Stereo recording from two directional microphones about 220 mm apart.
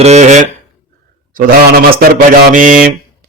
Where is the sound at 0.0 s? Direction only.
30° right (ahead or behind).